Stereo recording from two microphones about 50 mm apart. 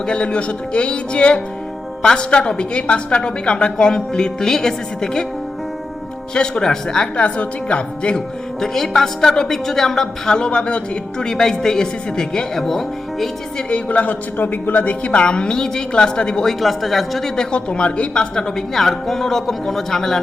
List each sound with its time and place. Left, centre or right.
0.0 s a woman's voice: centre
6.3 s a woman's voice: centre
8.6 s a woman's voice: centre; by 10.8 s left
11.2 s a woman's voice: centre
13.7 s a woman's voice: left
16.6 s speech: centre
17.3 s a woman's voice: centre